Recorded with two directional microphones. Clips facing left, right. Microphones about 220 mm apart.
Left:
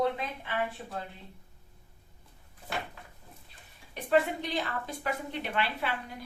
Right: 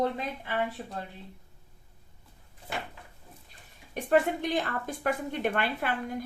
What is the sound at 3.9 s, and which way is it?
A woman's voice, 50° right (ahead or behind).